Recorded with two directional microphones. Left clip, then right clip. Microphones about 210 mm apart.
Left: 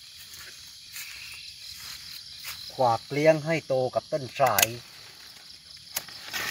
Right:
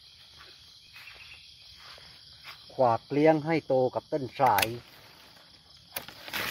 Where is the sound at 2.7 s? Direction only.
30° right (ahead or behind).